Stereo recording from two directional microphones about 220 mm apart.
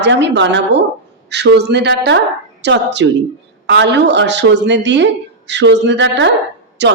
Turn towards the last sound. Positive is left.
turn(degrees=-50)  # may be behind; listen again after turning